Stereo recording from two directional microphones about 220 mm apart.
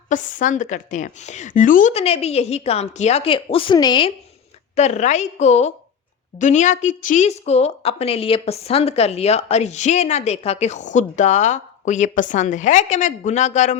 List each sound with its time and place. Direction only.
0.1 s a woman's voice: 35° left (ahead or behind)
4.7 s a woman's voice: 30° left (ahead or behind)